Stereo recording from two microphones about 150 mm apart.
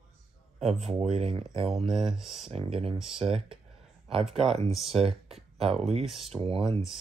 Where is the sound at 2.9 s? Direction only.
5° right (ahead or behind).